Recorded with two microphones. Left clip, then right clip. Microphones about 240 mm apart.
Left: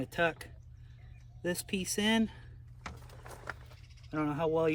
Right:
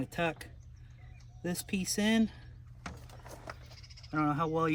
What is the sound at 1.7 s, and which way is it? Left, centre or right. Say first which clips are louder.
Speech: even; right.